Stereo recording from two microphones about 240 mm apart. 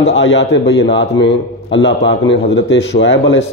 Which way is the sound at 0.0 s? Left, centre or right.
Left.